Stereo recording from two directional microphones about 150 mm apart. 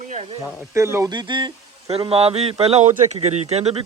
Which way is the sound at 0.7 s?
20° right (ahead or behind).